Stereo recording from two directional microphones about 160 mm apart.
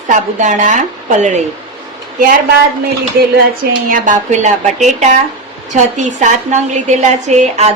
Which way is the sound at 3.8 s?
55° right (ahead or behind).